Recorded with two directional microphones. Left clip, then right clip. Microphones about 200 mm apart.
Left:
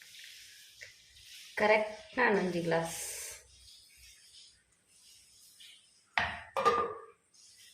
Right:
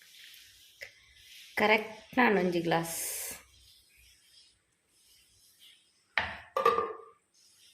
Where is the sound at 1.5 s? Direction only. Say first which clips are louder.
Right 1 dB; 35° right (ahead or behind).